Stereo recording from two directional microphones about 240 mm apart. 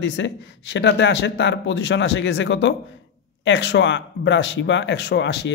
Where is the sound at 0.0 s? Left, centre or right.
Left.